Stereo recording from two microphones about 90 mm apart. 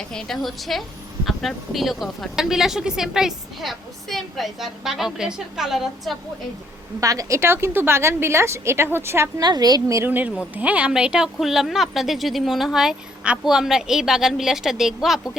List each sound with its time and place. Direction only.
0.1 s speech: 5° left (ahead or behind)
7.0 s a woman's voice: 40° right (ahead or behind)
9.4 s a woman's voice: 50° right (ahead or behind)
10.0 s speech: 20° right (ahead or behind); by 15.3 s 5° right (ahead or behind)